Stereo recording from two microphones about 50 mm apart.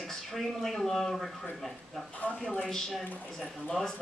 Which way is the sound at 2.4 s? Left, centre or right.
Centre.